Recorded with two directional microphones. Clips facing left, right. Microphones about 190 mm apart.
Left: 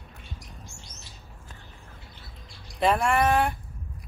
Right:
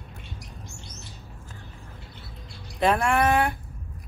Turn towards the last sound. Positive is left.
turn(degrees=0)  # may be behind; listen again after turning